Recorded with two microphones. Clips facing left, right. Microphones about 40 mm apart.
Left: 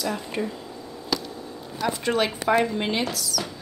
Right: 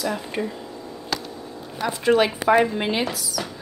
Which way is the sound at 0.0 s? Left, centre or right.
Centre.